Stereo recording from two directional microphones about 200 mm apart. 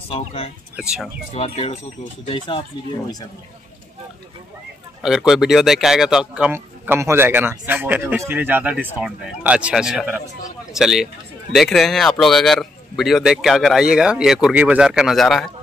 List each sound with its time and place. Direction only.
0.7 s a man's voice: 5° right (ahead or behind)
1.3 s speech: 30° left (ahead or behind)
5.0 s a man's voice: centre (ahead or behind)